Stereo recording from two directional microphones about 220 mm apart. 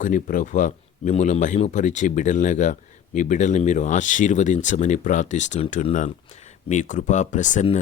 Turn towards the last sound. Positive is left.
turn(degrees=35)  # may be behind; listen again after turning